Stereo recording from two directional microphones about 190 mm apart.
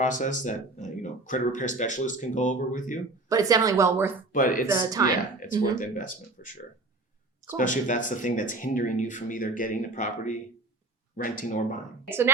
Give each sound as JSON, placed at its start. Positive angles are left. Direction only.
{"t": 0.0, "sound": "speech", "side_deg": 40}
{"t": 3.2, "sound": "speech", "side_deg": -20}
{"t": 4.3, "sound": "speech", "side_deg": 45}
{"t": 4.7, "sound": "speech", "side_deg": -20}
{"t": 5.4, "sound": "speech", "side_deg": 45}
{"t": 7.5, "sound": "speech", "side_deg": 45}
{"t": 12.0, "sound": "speech", "side_deg": -10}